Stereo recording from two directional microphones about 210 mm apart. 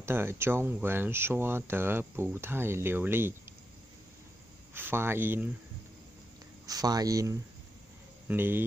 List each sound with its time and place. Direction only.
0.0 s speech: 10° right (ahead or behind)
4.7 s speech: 10° right (ahead or behind)
6.6 s speech: 20° right (ahead or behind)